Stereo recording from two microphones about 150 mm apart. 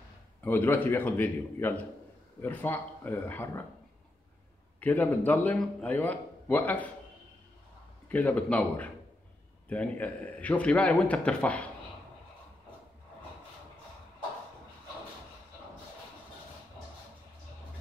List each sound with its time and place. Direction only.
0.4 s a man's voice: 10° left (ahead or behind)
4.7 s a man's voice: 10° left (ahead or behind)
8.1 s a man's voice: 10° left (ahead or behind)